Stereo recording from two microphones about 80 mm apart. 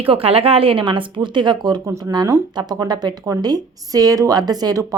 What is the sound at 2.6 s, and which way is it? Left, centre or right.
Speech, right.